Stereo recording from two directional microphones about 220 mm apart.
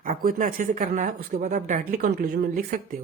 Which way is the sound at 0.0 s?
40° right (ahead or behind).